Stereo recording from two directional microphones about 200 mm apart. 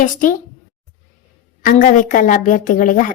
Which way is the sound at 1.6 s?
40° left (ahead or behind).